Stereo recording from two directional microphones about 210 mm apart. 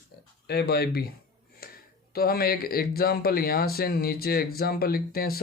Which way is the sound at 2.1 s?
45° left (ahead or behind).